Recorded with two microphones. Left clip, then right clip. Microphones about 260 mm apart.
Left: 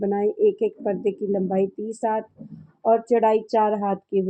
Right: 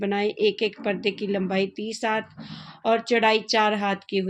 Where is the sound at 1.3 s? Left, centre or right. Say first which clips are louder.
Left 2 dB; right.